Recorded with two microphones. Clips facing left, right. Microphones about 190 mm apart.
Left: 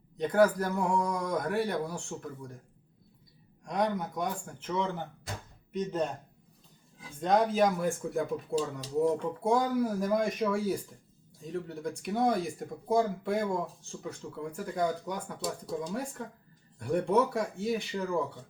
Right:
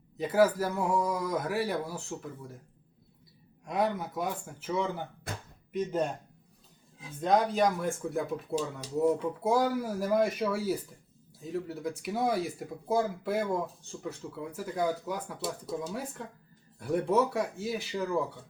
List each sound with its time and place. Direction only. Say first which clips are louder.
0.2 s speech: even; 5° right (ahead or behind)
3.6 s speech: even; 5° right (ahead or behind)
5.3 s speech: right 1 dB; 55° right (ahead or behind)
5.7 s speech: right 1 dB; 10° right (ahead or behind)
7.2 s speech: even; centre (ahead or behind)